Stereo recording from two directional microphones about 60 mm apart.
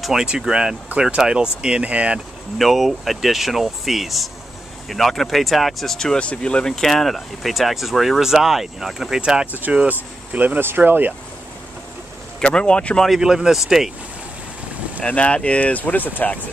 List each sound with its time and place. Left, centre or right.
0.0 s speech: centre
2.6 s speech: centre
9.5 s speech: right
12.4 s speech: centre
13.2 s speech: centre
15.0 s speech: centre